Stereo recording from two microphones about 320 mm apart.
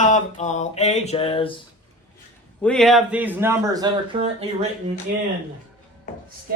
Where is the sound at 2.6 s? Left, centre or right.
Centre.